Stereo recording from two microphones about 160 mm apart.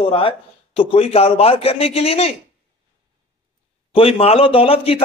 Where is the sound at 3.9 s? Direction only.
35° left (ahead or behind).